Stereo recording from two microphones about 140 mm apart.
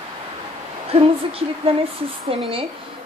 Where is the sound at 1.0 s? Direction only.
40° right (ahead or behind).